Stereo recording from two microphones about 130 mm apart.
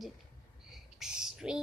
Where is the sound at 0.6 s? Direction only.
5° right (ahead or behind).